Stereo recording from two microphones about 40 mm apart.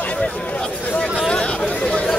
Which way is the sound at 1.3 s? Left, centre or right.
Left.